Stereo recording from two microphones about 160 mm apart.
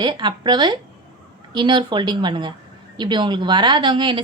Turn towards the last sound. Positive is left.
turn(degrees=-30)  # may be behind; listen again after turning